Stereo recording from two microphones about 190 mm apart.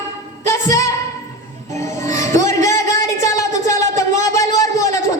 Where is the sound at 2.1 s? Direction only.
15° left (ahead or behind).